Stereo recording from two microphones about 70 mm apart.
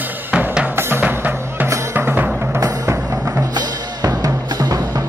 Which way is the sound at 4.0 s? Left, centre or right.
Right.